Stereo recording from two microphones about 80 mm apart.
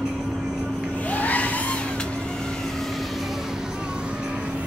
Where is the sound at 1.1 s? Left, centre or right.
Centre.